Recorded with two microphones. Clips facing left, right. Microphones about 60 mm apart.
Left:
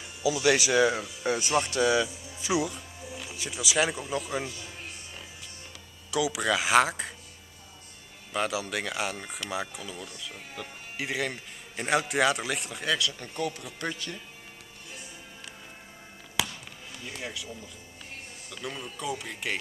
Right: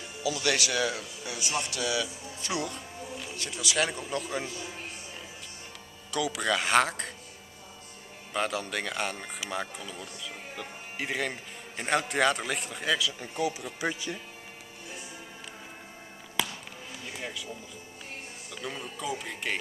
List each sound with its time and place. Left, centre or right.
0.2 s speech: centre
1.2 s speech: left
2.4 s music: centre
3.2 s speech: centre
6.1 s speech: centre
8.3 s speech: centre
16.4 s basketball bounce: centre
17.0 s speech: centre
18.5 s speech: centre